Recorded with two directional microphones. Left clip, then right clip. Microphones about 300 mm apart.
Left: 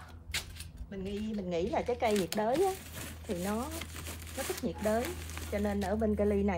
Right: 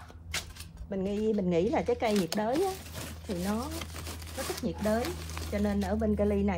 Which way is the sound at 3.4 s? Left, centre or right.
Right.